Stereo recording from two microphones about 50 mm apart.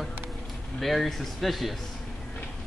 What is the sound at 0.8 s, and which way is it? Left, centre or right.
A man's voice, centre.